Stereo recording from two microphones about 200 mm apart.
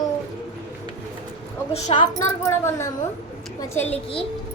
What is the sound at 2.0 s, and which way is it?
Speech, 15° left (ahead or behind).